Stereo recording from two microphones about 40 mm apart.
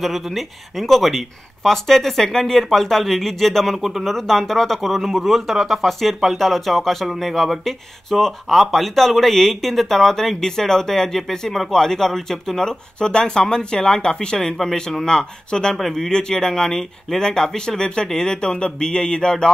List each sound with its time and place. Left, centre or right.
0.0 s speech: centre
14.6 s speech: centre